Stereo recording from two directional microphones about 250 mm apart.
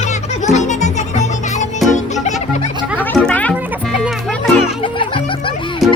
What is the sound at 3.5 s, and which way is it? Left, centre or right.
Music, centre.